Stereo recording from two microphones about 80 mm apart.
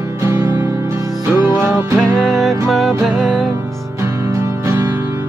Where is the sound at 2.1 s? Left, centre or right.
Centre.